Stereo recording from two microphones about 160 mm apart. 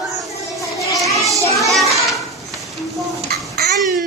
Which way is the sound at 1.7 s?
Centre (ahead or behind).